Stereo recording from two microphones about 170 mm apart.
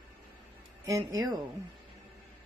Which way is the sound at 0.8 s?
20° right (ahead or behind).